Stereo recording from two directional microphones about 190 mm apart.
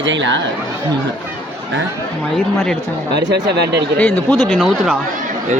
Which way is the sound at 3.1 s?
65° right (ahead or behind).